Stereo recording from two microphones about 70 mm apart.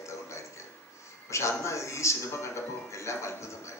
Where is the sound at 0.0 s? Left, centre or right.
Left.